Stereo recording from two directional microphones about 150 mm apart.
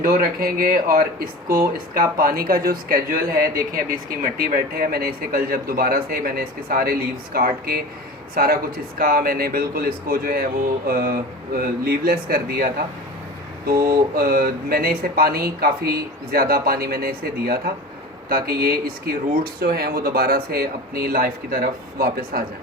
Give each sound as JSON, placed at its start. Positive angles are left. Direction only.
{"t": 0.0, "sound": "a man's voice", "side_deg": -70}
{"t": 9.0, "sound": "speech", "side_deg": -70}
{"t": 10.8, "sound": "a man's voice", "side_deg": -85}